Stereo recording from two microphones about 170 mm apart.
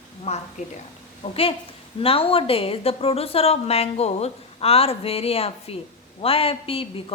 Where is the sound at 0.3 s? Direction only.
40° left (ahead or behind).